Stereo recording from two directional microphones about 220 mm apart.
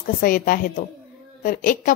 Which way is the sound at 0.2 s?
40° left (ahead or behind).